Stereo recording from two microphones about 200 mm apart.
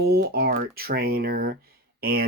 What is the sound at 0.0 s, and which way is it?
Speech, 50° right (ahead or behind).